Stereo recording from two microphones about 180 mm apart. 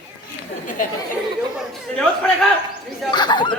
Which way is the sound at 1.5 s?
5° left (ahead or behind).